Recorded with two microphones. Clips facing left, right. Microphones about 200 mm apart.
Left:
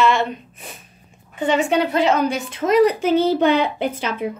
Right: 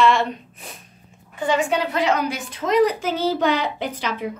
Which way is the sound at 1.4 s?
25° left (ahead or behind).